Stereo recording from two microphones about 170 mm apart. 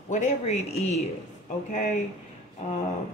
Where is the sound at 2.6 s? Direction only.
45° left (ahead or behind).